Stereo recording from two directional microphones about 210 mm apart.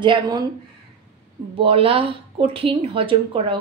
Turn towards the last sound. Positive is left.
turn(degrees=-25)  # may be behind; listen again after turning